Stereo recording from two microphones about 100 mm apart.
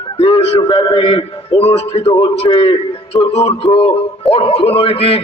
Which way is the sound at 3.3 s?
90° left.